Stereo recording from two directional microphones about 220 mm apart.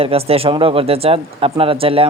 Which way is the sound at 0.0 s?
25° right (ahead or behind).